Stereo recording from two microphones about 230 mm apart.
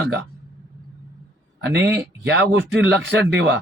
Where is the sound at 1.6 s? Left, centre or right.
Right.